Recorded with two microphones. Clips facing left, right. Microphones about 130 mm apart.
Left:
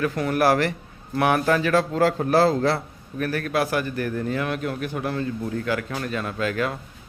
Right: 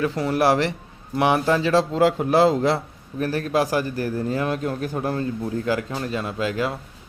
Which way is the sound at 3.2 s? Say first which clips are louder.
Right 2 dB; 35° right (ahead or behind).